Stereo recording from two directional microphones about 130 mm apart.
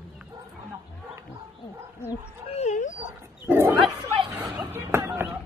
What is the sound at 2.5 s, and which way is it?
Dog, 60° left (ahead or behind).